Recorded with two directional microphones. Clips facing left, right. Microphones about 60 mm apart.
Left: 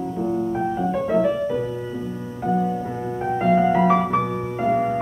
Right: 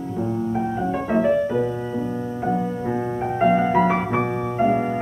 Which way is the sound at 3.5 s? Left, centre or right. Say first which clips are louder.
Left 4 dB; right.